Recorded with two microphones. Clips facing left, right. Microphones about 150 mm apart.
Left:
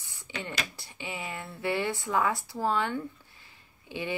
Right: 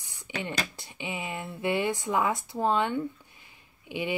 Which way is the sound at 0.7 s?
20° right (ahead or behind).